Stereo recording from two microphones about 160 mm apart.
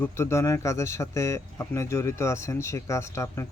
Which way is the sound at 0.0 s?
15° left (ahead or behind).